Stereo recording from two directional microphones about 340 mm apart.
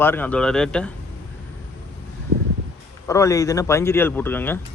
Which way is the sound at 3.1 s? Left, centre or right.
Centre.